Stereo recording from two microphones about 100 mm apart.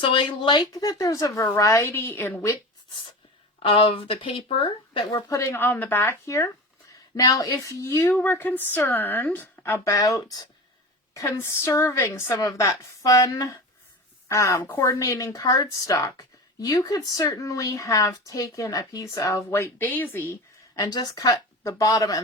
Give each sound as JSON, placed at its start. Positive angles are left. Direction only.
{"t": 0.0, "sound": "a woman's voice", "side_deg": 60}
{"t": 3.6, "sound": "speech", "side_deg": 70}
{"t": 5.3, "sound": "speech", "side_deg": 30}
{"t": 6.2, "sound": "a woman's voice", "side_deg": 30}
{"t": 9.9, "sound": "a woman's voice", "side_deg": 35}
{"t": 20.7, "sound": "a woman's voice", "side_deg": 40}